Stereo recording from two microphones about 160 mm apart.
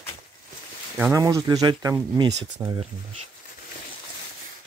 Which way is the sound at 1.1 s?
20° right (ahead or behind).